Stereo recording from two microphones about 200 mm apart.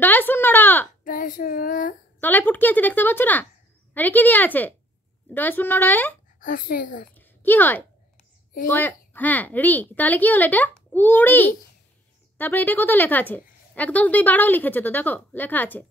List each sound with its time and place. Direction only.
0.0 s a sound: 10° left (ahead or behind)
1.0 s child singing: 45° left (ahead or behind)
2.1 s a woman's voice: 10° left (ahead or behind)
6.4 s child singing: 45° left (ahead or behind)
7.2 s a sound: 10° left (ahead or behind)
8.6 s a woman's voice: 10° left (ahead or behind)